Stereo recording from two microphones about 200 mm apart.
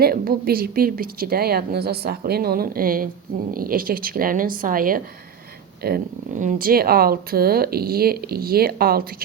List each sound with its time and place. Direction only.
0.0 s speech: 50° right (ahead or behind)